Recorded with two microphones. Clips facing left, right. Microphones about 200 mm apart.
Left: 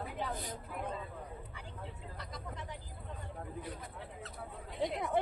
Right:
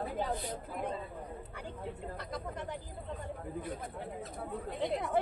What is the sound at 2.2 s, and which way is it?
Speech, 55° right (ahead or behind).